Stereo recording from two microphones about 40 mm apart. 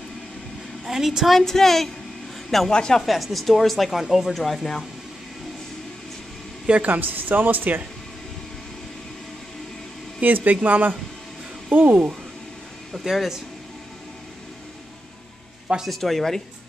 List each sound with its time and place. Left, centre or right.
0.8 s a woman's voice: centre
1.4 s speech: centre
2.7 s speech: left
3.1 s speech: centre
4.3 s speech: centre
6.9 s speech: right
10.2 s speech: right
12.9 s speech: centre
15.9 s speech: centre